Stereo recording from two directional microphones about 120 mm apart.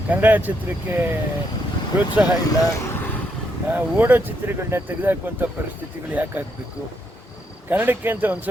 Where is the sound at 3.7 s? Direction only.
15° right (ahead or behind).